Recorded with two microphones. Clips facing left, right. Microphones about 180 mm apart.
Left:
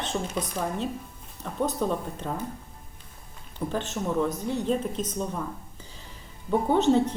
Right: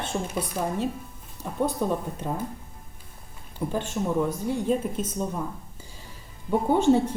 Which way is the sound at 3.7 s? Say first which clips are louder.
Right 2 dB; 10° right (ahead or behind).